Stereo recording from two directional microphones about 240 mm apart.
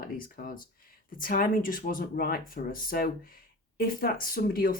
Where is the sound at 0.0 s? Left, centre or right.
Left.